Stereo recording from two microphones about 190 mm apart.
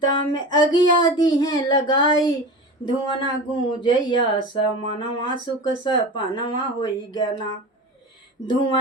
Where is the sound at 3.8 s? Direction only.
25° left (ahead or behind).